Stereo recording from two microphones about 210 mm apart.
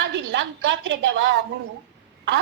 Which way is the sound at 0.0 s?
55° right (ahead or behind).